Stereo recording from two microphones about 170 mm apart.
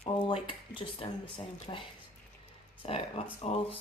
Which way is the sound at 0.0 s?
30° left (ahead or behind).